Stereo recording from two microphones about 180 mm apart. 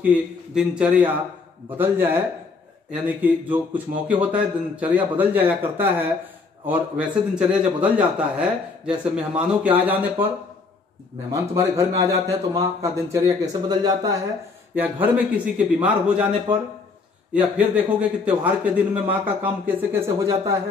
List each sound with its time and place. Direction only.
0.0 s speech: 5° right (ahead or behind)
14.8 s a man's voice: 10° right (ahead or behind)